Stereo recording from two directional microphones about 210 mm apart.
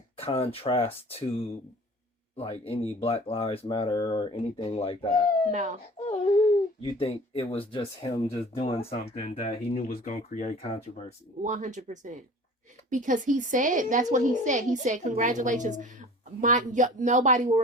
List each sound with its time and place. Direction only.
0.2 s speech: 25° left (ahead or behind)
5.5 s a woman's voice: 35° right (ahead or behind)
6.8 s speech: 25° left (ahead or behind)
11.4 s a woman's voice: 35° right (ahead or behind)